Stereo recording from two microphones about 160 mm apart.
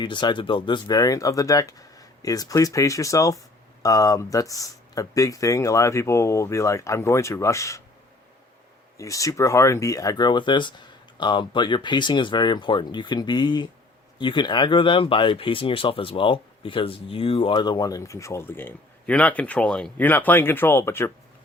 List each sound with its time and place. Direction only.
0.0 s speech: 30° left (ahead or behind)
9.0 s speech: 20° left (ahead or behind)